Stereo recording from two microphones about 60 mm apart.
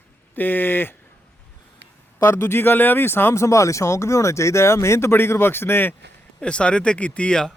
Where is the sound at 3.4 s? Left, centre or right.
Left.